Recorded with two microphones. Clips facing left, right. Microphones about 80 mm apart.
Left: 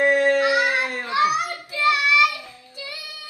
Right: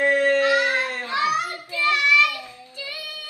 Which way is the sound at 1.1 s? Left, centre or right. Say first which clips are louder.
Left 3 dB; centre.